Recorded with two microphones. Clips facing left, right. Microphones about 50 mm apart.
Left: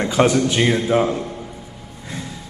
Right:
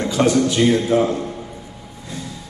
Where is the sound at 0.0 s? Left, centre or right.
Left.